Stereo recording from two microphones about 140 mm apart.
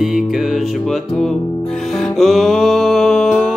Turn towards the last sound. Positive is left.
turn(degrees=0)  # may be behind; listen again after turning